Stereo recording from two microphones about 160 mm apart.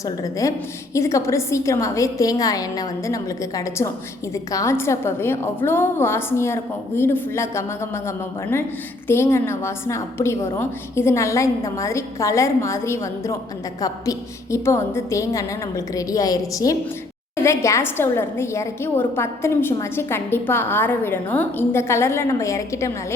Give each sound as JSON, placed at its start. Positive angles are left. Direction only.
{"t": 0.2, "sound": "a woman's voice", "side_deg": 20}